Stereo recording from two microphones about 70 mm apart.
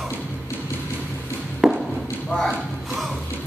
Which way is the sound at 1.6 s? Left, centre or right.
Centre.